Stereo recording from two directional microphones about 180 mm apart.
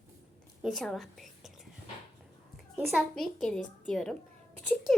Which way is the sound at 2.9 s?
5° left (ahead or behind).